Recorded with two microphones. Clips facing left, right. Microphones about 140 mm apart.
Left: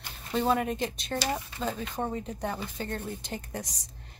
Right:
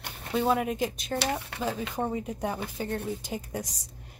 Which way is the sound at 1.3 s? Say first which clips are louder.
Right 2 dB; 70° right (ahead or behind).